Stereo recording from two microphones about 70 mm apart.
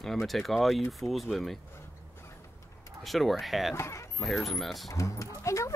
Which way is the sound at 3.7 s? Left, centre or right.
Left.